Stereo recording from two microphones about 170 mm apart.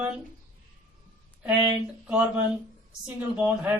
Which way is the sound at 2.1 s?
10° right (ahead or behind).